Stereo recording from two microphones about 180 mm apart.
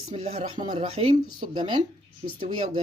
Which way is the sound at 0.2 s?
50° right (ahead or behind).